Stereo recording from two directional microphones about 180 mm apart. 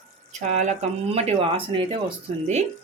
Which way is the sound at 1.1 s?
30° right (ahead or behind).